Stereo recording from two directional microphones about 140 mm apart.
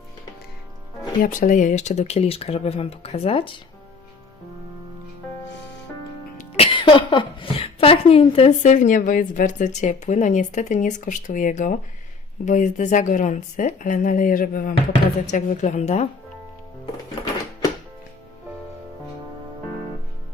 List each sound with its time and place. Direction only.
1.2 s speech: 70° left (ahead or behind); by 3.5 s 40° left (ahead or behind)
6.6 s a woman's voice: 35° left (ahead or behind); by 14.8 s 85° left
15.3 s speech: 65° left (ahead or behind)